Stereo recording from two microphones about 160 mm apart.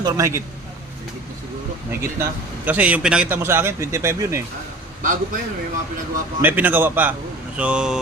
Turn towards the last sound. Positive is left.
turn(degrees=-5)  # may be behind; listen again after turning